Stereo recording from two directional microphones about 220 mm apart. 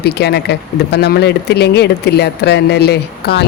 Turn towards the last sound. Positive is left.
turn(degrees=45)  # may be behind; listen again after turning